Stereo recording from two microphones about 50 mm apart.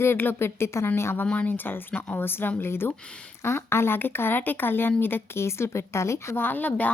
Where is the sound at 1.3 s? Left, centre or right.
Left.